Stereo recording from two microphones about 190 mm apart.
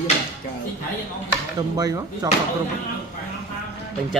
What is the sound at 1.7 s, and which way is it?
Speech, 20° right (ahead or behind).